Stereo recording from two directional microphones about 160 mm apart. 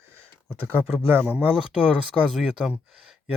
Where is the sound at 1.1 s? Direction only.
10° right (ahead or behind).